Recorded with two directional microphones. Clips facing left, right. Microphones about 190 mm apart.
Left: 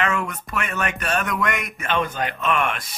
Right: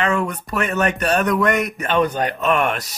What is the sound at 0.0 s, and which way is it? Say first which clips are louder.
Speech: right 4 dB; 35° right (ahead or behind).